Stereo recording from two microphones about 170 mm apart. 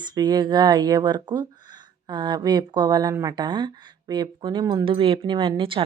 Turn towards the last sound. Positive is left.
turn(degrees=-30)  # may be behind; listen again after turning